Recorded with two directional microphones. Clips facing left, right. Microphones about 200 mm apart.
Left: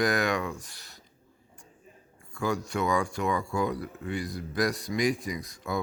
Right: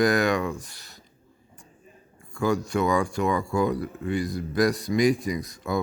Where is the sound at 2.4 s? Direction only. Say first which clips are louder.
Right 5 dB; 40° right (ahead or behind).